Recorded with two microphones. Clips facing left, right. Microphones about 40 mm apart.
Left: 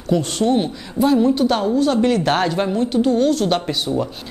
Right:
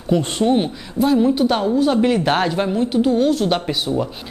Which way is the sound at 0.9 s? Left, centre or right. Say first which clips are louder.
Even; centre.